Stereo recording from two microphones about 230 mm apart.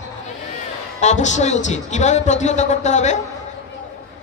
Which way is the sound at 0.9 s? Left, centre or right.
Left.